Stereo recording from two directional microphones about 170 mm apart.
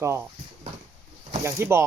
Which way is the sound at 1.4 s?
15° right (ahead or behind).